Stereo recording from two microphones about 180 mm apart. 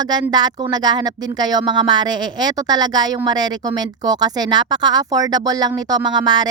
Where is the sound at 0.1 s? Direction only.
25° right (ahead or behind).